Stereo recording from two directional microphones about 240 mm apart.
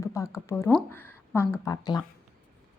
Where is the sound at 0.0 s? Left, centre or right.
Centre.